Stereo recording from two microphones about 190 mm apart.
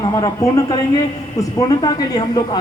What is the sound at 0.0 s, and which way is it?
Speech, 20° left (ahead or behind).